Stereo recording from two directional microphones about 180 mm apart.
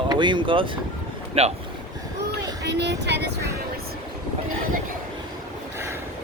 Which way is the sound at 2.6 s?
70° right (ahead or behind).